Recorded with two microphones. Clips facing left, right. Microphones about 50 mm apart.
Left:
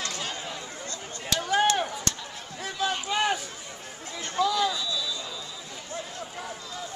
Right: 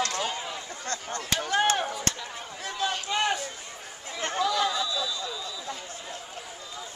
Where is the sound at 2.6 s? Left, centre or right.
Centre.